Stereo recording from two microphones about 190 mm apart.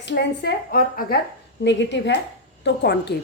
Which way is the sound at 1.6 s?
70° left (ahead or behind).